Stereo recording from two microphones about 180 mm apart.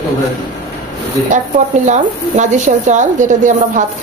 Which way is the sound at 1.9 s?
45° right (ahead or behind).